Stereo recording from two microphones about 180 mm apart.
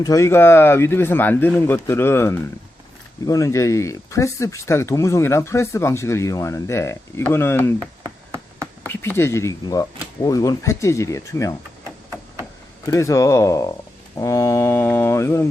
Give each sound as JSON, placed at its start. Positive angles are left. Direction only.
{"t": 0.0, "sound": "speech", "side_deg": 20}
{"t": 8.9, "sound": "speech", "side_deg": 10}
{"t": 12.8, "sound": "speech", "side_deg": 15}